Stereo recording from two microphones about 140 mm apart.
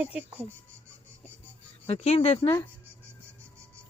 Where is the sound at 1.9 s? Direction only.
50° left (ahead or behind).